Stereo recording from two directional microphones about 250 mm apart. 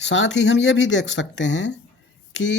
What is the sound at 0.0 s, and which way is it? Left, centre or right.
Speech, left.